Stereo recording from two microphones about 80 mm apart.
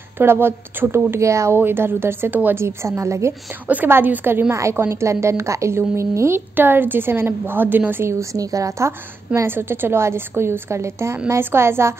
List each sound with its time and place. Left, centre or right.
0.2 s a woman's voice: right
1.6 s a woman's voice: right
3.6 s a woman's voice: right